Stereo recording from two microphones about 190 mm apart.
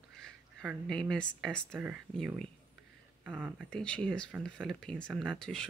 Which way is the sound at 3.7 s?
5° left (ahead or behind).